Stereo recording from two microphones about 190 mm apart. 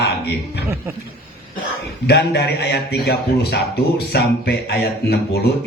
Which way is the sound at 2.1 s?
60° left (ahead or behind).